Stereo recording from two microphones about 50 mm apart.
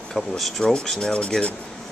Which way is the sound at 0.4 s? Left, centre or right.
Centre.